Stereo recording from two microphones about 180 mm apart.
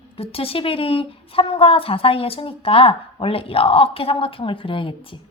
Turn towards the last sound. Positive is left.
turn(degrees=30)  # may be behind; listen again after turning